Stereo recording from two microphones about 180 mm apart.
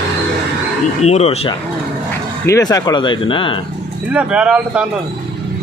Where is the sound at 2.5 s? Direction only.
20° left (ahead or behind).